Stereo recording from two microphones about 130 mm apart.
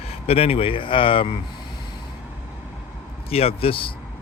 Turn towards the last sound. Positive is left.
turn(degrees=45)  # may be behind; listen again after turning